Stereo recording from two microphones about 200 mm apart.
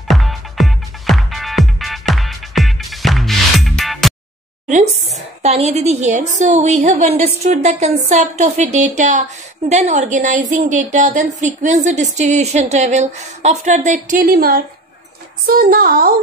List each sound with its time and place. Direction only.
0.1 s music: centre (ahead or behind)
5.4 s a woman's voice: 35° right (ahead or behind)